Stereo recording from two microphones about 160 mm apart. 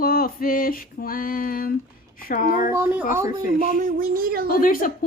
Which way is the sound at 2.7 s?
15° right (ahead or behind).